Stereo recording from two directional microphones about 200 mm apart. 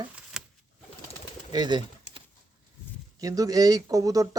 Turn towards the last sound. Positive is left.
turn(degrees=-15)  # may be behind; listen again after turning